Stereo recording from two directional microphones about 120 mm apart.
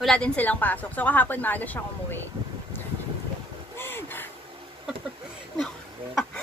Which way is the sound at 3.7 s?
20° left (ahead or behind).